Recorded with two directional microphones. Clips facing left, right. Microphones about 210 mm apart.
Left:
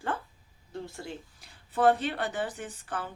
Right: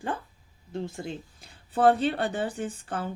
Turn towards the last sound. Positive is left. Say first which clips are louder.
# right 5 dB
turn(degrees=-25)  # may be behind; listen again after turning